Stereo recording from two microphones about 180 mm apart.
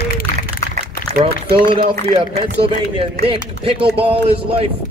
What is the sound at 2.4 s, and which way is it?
Speech, 30° right (ahead or behind).